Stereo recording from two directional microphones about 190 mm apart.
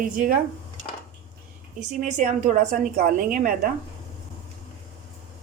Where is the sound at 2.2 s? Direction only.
40° right (ahead or behind).